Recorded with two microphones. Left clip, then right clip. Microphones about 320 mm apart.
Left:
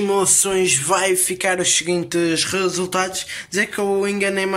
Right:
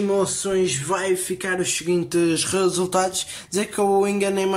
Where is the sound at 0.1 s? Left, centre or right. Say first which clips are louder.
Left 3 dB; centre.